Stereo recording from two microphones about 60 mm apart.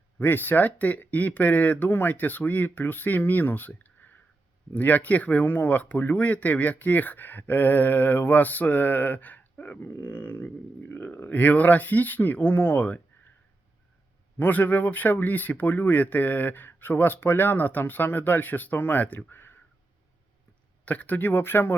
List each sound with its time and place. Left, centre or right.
0.2 s speech: left
14.3 s speech: left
20.8 s speech: left